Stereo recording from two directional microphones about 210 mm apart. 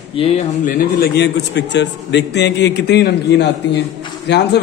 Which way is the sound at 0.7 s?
50° left (ahead or behind).